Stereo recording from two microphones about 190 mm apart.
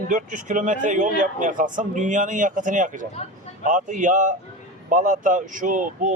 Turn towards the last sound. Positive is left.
turn(degrees=-40)  # may be behind; listen again after turning